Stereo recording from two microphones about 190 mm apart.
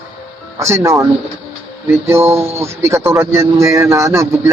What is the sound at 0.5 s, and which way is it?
Speech, 15° right (ahead or behind).